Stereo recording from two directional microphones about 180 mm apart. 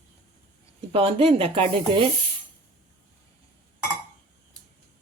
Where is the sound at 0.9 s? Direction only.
30° right (ahead or behind).